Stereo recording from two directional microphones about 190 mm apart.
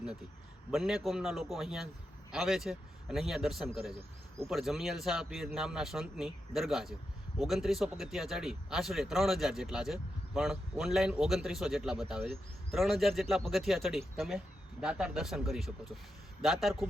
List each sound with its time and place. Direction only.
0.7 s speech: centre (ahead or behind)